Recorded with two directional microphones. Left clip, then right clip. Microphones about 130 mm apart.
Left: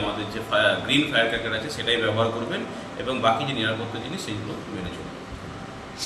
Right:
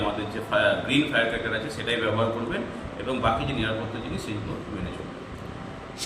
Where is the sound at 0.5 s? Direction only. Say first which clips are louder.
Left 2 dB; 15° left (ahead or behind).